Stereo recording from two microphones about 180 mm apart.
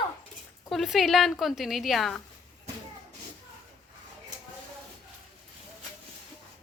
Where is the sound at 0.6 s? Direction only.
Centre (ahead or behind).